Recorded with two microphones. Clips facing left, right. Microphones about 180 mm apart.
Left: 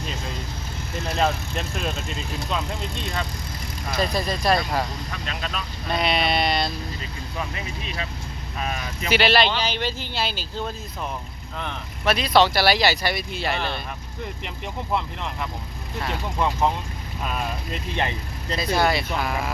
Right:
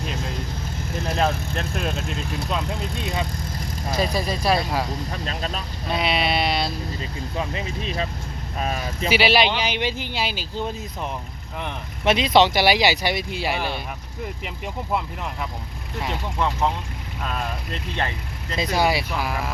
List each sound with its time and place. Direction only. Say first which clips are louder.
1.5 s speech: right 2 dB; centre (ahead or behind)
3.9 s speech: right 1 dB; 10° right (ahead or behind)
5.1 s speech: right 2 dB; 35° right (ahead or behind)
5.9 s speech: even; 5° right (ahead or behind)
7.3 s speech: right 3 dB; 30° right (ahead or behind)
9.0 s speech: right 1 dB; 10° right (ahead or behind)
16.0 s speech: even; 10° left (ahead or behind)
18.5 s speech: even; 20° right (ahead or behind)